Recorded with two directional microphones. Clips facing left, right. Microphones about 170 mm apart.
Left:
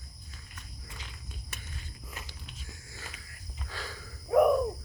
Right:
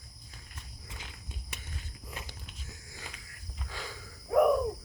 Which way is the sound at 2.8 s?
15° right (ahead or behind).